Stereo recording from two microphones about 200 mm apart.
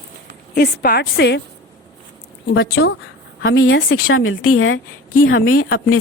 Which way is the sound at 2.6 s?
55° left (ahead or behind).